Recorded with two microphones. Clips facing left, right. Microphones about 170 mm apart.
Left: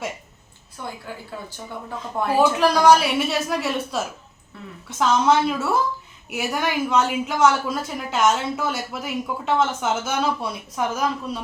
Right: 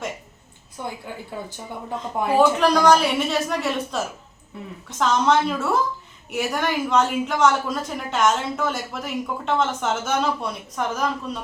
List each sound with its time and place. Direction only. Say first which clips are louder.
0.8 s speech: right 2 dB; 15° right (ahead or behind)
2.1 s speech: right 1 dB; 15° right (ahead or behind)
2.6 s speech: left 1 dB; 5° left (ahead or behind)
4.5 s speech: right 3 dB; 15° right (ahead or behind)
4.9 s speech: left 1 dB; 5° left (ahead or behind)